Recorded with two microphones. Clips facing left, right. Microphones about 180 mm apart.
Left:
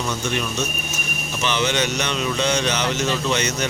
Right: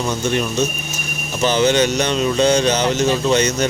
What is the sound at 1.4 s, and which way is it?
Speech, 40° right (ahead or behind).